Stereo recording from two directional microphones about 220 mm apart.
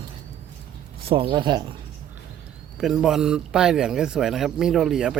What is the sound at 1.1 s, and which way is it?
Speech, 25° right (ahead or behind).